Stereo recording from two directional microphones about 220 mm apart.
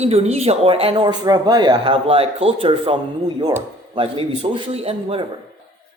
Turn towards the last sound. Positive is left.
turn(degrees=-25)  # may be behind; listen again after turning